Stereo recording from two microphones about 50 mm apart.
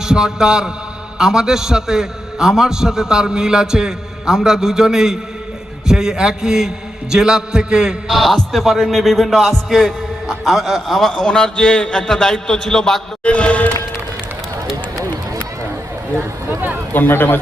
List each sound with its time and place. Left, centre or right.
0.0 s a man's voice: centre
8.0 s a man's voice: centre
11.1 s a man's voice: centre
13.2 s speech: left
16.1 s speech: right
16.9 s speech: left